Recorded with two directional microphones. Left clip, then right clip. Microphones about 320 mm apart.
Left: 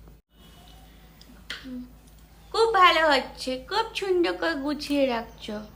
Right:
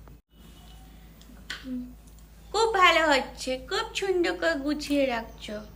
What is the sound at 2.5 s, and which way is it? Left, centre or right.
A woman's voice, centre.